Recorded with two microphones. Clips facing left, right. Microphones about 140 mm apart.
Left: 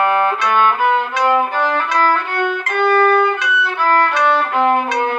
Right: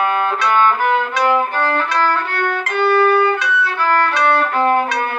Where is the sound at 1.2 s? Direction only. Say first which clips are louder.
Left 1 dB; 15° left (ahead or behind).